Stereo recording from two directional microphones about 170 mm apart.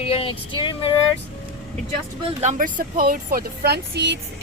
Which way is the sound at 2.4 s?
45° right (ahead or behind).